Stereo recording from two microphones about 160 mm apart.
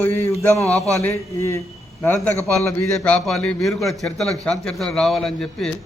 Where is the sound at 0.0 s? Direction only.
15° left (ahead or behind).